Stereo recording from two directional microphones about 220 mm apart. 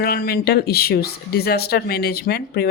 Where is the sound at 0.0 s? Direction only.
45° left (ahead or behind).